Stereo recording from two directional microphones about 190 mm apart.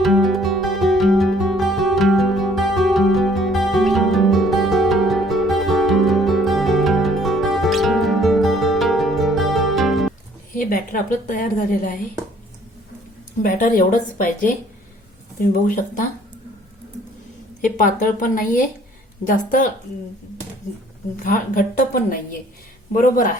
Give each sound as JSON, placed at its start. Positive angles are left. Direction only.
{"t": 0.0, "sound": "music", "side_deg": 0}
{"t": 10.5, "sound": "a woman's voice", "side_deg": 45}
{"t": 13.4, "sound": "speech", "side_deg": 45}
{"t": 17.7, "sound": "speech", "side_deg": 45}
{"t": 21.2, "sound": "speech", "side_deg": 45}